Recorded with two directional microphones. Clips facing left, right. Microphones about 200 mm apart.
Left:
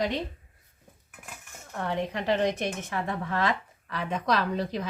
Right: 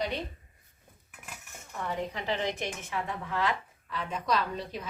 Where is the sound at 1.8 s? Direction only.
70° left (ahead or behind).